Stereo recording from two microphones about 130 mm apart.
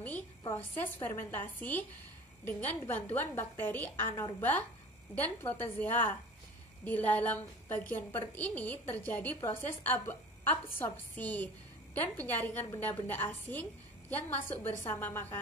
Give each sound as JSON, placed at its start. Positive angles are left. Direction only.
{"t": 0.5, "sound": "a woman's voice", "side_deg": 20}
{"t": 14.8, "sound": "a woman's voice", "side_deg": 15}